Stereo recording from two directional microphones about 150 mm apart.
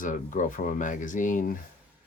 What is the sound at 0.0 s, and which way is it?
Speech, 60° left (ahead or behind).